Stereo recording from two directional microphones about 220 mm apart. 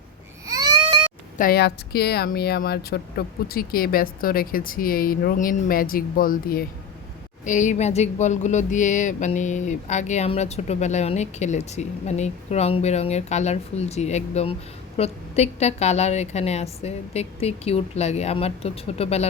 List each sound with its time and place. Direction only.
0.4 s baby cry: 15° right (ahead or behind)
1.4 s a woman's voice: 45° left (ahead or behind); by 19.3 s 30° left (ahead or behind)